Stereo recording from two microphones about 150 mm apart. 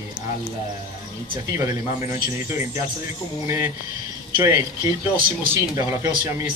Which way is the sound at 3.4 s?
15° right (ahead or behind).